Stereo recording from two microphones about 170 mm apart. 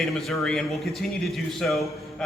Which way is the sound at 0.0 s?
Centre (ahead or behind).